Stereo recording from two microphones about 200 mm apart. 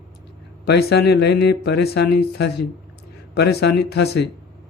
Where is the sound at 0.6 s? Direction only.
55° left (ahead or behind).